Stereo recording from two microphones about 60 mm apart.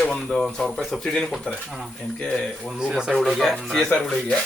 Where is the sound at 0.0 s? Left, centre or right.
Centre.